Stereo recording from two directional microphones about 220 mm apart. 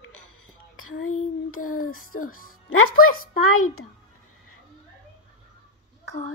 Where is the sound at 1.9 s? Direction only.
75° left (ahead or behind).